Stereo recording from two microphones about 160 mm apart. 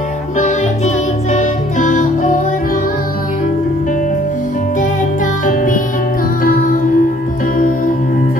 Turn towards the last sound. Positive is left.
turn(degrees=55)  # may be behind; listen again after turning